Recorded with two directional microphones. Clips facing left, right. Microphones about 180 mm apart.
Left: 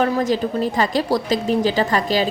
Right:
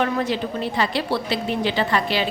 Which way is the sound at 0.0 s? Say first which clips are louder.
Left 4 dB; 40° left (ahead or behind).